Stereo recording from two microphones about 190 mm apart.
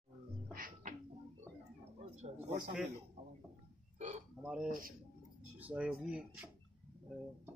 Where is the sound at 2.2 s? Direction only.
30° right (ahead or behind).